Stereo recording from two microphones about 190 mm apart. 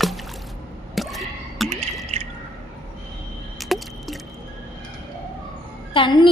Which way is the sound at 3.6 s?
Centre (ahead or behind).